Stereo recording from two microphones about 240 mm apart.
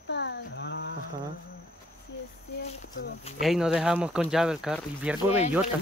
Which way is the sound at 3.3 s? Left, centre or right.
Centre.